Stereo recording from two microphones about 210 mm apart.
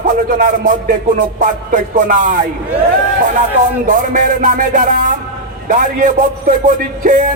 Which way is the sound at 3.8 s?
40° right (ahead or behind).